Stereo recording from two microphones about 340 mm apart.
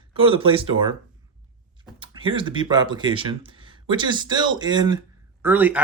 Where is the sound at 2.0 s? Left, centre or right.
Centre.